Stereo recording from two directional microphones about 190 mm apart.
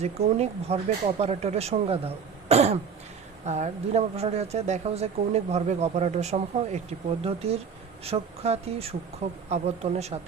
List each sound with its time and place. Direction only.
0.0 s speech: 35° right (ahead or behind)